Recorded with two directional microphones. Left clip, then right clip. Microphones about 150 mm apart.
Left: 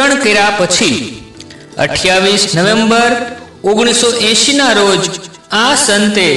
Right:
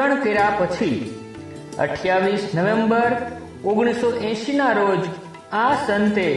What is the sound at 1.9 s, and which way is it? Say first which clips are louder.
A man's voice: left 10 dB; 30° left (ahead or behind).